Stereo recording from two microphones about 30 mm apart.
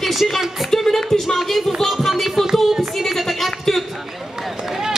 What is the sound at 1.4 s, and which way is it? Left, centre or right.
Music, centre.